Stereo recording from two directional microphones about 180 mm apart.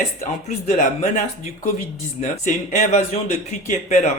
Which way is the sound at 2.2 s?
45° left (ahead or behind).